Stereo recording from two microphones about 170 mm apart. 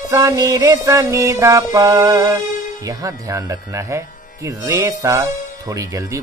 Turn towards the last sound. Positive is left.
turn(degrees=-20)  # may be behind; listen again after turning